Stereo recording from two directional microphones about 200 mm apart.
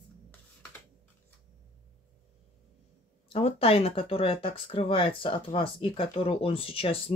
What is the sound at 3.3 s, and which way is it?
Speech, 30° left (ahead or behind).